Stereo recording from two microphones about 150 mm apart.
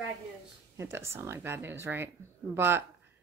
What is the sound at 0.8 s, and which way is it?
A woman's voice, 15° right (ahead or behind).